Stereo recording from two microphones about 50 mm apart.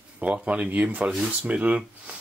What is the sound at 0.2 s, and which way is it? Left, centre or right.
Speech, right.